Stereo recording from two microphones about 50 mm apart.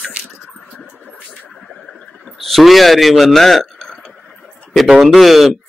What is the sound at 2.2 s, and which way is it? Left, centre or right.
A man's voice, centre.